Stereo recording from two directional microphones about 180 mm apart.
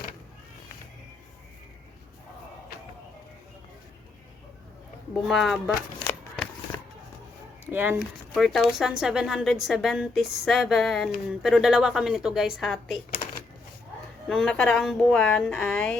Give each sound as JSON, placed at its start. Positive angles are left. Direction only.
{"t": 5.3, "sound": "a woman's voice", "side_deg": 0}
{"t": 6.7, "sound": "music", "side_deg": 20}
{"t": 7.7, "sound": "a woman's voice", "side_deg": -10}
{"t": 14.3, "sound": "a woman's voice", "side_deg": 5}